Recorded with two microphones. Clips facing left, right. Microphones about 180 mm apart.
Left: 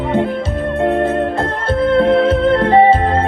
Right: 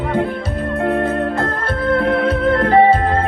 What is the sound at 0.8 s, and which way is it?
Organ, 25° left (ahead or behind).